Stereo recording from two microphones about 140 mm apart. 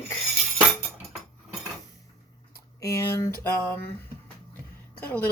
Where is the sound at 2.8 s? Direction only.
20° left (ahead or behind).